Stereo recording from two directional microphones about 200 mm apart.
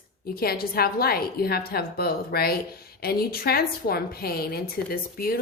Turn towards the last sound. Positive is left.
turn(degrees=50)  # may be behind; listen again after turning